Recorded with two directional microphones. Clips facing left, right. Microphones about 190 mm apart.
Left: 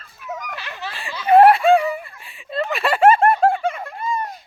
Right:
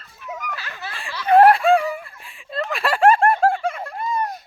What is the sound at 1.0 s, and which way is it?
Snicker, 5° left (ahead or behind).